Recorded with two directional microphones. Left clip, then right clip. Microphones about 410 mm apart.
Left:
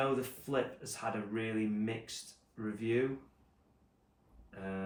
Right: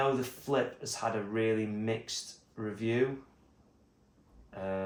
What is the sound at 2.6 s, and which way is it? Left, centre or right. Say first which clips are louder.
Speech: right 2 dB; centre.